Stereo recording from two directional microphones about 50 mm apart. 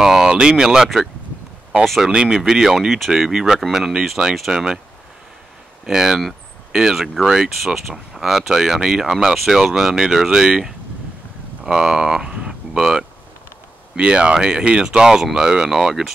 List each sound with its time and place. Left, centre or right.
0.0 s speech: centre
2.0 s speech: centre
5.9 s speech: centre
11.6 s speech: centre
12.7 s speech: centre
13.9 s speech: right